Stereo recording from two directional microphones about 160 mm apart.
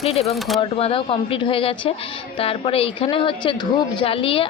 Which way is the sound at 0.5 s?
35° left (ahead or behind).